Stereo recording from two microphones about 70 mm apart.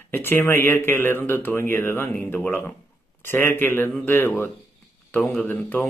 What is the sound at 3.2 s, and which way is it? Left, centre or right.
Speech, left.